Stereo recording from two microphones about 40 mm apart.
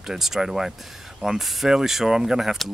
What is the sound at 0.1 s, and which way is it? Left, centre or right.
Speech, centre.